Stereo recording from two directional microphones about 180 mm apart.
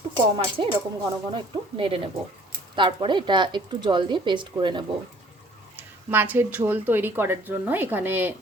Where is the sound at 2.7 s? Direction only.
25° right (ahead or behind).